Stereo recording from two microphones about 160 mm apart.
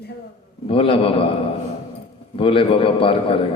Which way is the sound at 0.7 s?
35° left (ahead or behind).